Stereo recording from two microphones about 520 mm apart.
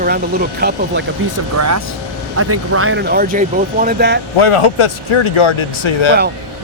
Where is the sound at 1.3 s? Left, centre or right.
Right.